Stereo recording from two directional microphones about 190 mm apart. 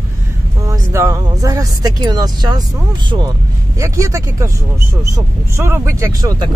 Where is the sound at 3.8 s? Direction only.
15° right (ahead or behind).